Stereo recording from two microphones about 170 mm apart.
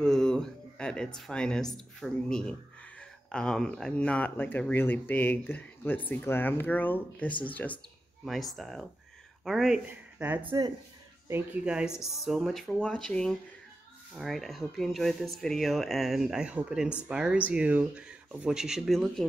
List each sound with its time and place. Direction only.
0.0 s speech: 5° left (ahead or behind)
10.4 s speech: 25° right (ahead or behind)
11.2 s speech: 10° right (ahead or behind)